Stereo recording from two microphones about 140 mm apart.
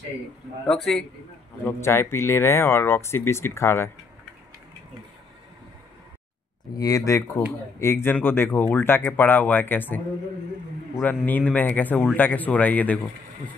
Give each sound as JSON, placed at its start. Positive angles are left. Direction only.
{"t": 0.7, "sound": "a man's voice", "side_deg": 0}
{"t": 1.6, "sound": "speech", "side_deg": 20}
{"t": 6.7, "sound": "speech", "side_deg": 25}